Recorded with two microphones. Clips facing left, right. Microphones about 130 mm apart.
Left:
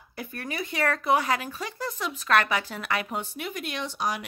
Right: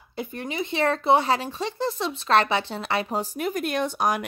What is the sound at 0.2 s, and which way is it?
Speech, 20° right (ahead or behind).